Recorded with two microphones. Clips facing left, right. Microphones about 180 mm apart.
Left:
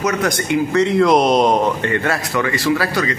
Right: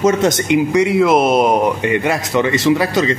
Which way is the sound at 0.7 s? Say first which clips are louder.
Left 1 dB; 10° right (ahead or behind).